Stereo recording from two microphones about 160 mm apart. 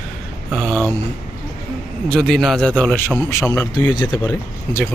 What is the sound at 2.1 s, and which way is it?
Speech, 5° left (ahead or behind).